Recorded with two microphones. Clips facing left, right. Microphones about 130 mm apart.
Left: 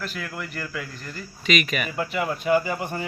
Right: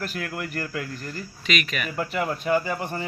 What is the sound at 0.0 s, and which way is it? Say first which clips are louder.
Speech: right 2 dB; 45° right (ahead or behind).